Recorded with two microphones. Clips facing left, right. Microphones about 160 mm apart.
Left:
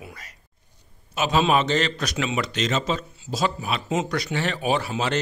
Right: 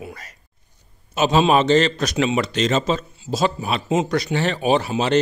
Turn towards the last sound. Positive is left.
turn(degrees=-20)  # may be behind; listen again after turning